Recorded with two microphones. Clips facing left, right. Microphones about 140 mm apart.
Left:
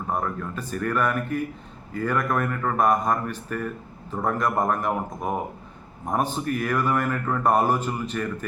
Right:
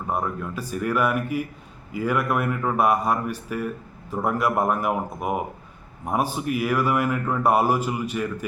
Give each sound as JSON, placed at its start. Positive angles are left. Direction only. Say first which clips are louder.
{"t": 0.1, "sound": "speech", "louder": "right 1 dB", "side_deg": -10}